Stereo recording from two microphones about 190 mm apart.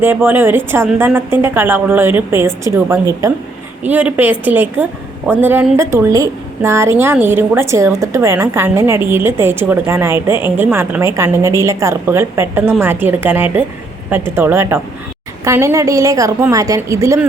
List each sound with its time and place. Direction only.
0.0 s a woman's voice: 10° right (ahead or behind)